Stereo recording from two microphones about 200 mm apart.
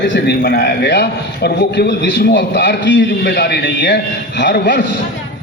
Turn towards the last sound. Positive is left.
turn(degrees=60)  # may be behind; listen again after turning